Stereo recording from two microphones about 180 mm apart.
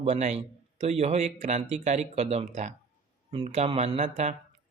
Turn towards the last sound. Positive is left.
turn(degrees=-40)  # may be behind; listen again after turning